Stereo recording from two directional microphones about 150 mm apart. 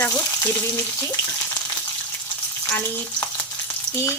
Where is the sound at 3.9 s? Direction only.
20° left (ahead or behind).